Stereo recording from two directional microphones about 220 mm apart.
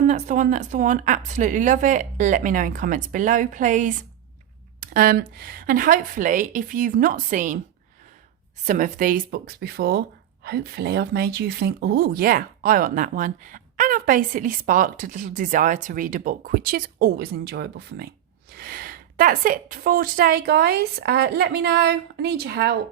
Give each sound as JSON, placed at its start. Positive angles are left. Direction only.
{"t": 0.1, "sound": "speech", "side_deg": -35}
{"t": 8.6, "sound": "speech", "side_deg": -35}